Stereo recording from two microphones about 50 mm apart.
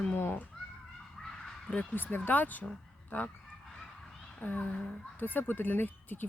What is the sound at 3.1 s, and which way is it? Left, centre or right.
Goose, left.